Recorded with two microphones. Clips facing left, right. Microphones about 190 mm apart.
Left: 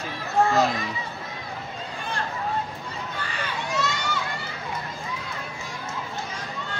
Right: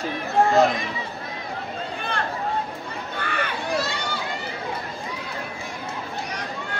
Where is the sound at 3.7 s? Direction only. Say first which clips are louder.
Even; 35° right (ahead or behind).